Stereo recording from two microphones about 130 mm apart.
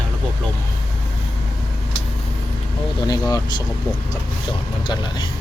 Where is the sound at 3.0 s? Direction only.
30° left (ahead or behind).